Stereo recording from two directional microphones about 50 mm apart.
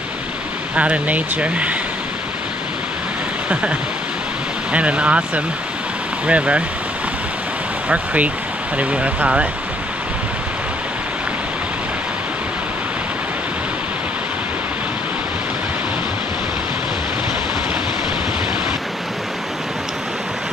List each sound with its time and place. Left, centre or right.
0.7 s speech: right
4.7 s speech: right
7.9 s speech: right